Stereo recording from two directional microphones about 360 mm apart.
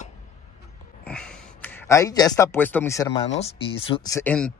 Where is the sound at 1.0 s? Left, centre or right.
Centre.